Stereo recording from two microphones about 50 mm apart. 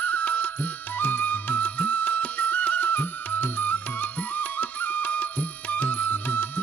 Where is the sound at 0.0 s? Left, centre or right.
Left.